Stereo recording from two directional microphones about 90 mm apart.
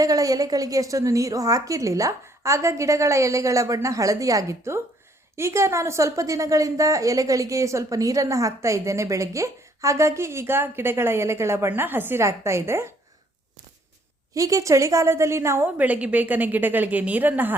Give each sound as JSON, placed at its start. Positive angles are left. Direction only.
{"t": 0.0, "sound": "a woman's voice", "side_deg": -40}
{"t": 14.3, "sound": "a woman's voice", "side_deg": -40}
{"t": 15.6, "sound": "a woman's voice", "side_deg": -15}